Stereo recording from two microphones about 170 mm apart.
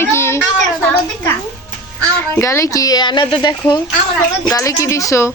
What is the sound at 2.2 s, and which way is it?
Speech, 15° left (ahead or behind).